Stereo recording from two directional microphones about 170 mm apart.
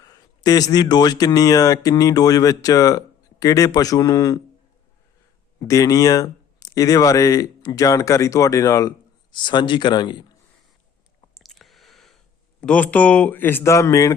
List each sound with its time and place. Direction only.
0.0 s speech: 20° left (ahead or behind)
5.5 s speech: 20° left (ahead or behind)
11.3 s a sound: centre (ahead or behind); by 14.2 s 20° left (ahead or behind)